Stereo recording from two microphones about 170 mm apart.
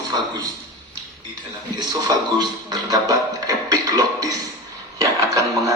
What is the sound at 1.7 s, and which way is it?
Speech, 25° right (ahead or behind).